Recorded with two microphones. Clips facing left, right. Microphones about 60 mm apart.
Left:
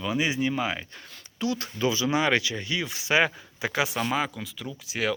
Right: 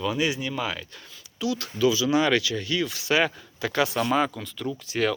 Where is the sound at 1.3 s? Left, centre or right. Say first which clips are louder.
Right 2 dB; left; by 4.0 s centre.